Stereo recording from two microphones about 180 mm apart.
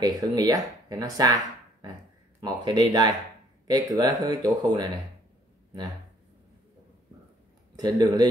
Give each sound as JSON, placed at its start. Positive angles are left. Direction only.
{"t": 0.0, "sound": "speech", "side_deg": -20}
{"t": 7.7, "sound": "speech", "side_deg": -20}